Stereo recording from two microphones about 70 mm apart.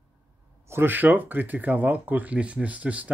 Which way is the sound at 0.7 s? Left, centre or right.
Right.